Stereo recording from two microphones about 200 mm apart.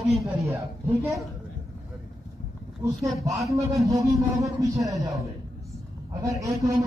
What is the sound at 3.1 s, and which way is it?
A man's voice, 15° right (ahead or behind).